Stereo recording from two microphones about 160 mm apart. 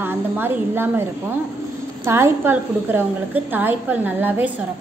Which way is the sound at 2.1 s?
15° right (ahead or behind).